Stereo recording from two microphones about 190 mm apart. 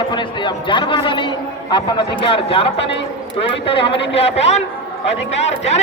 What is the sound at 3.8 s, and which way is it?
Speech, 70° left (ahead or behind).